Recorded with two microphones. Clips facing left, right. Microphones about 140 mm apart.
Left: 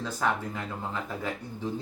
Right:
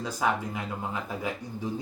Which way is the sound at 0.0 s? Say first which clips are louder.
Right 1 dB; 10° right (ahead or behind).